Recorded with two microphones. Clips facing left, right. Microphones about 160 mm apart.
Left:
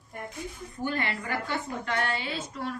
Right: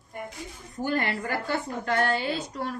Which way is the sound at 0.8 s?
45° right (ahead or behind).